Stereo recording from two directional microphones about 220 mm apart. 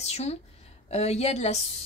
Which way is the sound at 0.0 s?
30° left (ahead or behind).